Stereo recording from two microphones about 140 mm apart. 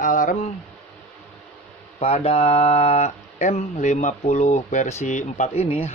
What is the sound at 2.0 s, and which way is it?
Speech, 50° left (ahead or behind).